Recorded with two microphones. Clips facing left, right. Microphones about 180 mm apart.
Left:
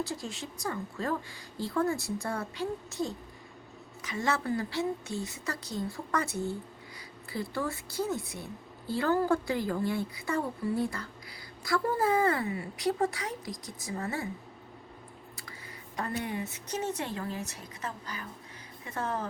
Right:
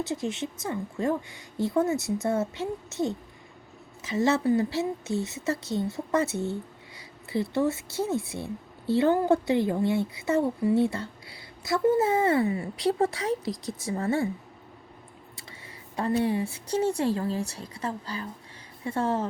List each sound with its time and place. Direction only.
0.0 s speech: 20° right (ahead or behind)
16.0 s speech: 30° right (ahead or behind)